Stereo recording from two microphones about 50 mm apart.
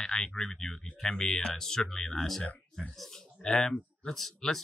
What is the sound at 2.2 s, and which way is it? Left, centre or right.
Speech, centre.